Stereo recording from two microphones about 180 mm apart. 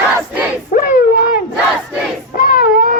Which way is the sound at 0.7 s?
45° left (ahead or behind).